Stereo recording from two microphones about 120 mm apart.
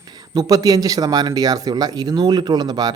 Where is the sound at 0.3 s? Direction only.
30° right (ahead or behind).